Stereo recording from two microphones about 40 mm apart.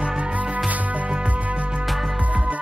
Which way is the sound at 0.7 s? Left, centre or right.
Right.